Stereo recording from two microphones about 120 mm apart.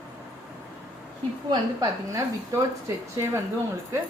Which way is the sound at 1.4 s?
30° right (ahead or behind).